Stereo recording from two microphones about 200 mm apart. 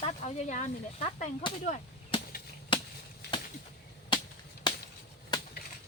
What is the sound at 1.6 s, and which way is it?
Chop, 35° left (ahead or behind).